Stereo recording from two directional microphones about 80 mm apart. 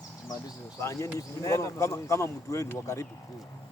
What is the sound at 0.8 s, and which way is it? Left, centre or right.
Speech, left.